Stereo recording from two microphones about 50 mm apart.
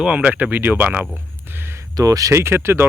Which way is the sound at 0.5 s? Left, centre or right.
Right.